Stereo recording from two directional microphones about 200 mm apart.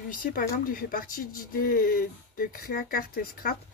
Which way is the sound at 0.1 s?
45° left (ahead or behind).